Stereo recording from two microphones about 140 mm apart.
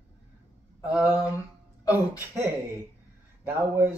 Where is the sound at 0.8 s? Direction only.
10° right (ahead or behind).